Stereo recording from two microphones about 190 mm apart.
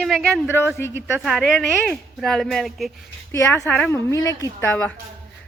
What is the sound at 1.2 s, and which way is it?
Speech, centre (ahead or behind).